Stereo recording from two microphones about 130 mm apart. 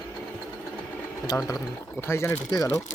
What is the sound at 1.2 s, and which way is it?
Speech, 30° left (ahead or behind).